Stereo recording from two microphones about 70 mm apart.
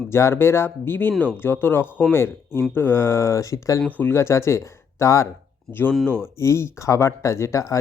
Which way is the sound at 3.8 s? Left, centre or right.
Left.